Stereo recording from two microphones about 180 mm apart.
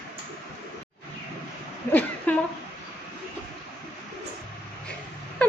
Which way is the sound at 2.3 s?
10° left (ahead or behind).